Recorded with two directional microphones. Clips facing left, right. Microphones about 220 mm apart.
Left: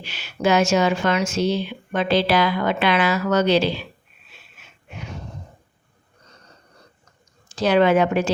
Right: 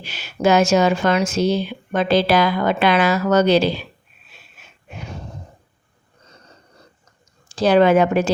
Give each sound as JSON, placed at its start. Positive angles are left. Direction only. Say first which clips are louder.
{"t": 0.0, "sound": "speech", "louder": "right 3 dB", "side_deg": -45}
{"t": 7.5, "sound": "speech", "louder": "right 3 dB", "side_deg": -35}